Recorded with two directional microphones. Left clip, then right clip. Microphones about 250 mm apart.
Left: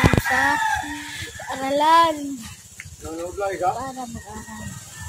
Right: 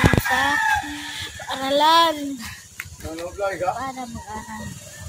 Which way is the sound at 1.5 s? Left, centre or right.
Centre.